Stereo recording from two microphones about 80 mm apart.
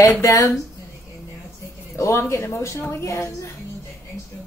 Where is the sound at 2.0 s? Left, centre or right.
Left.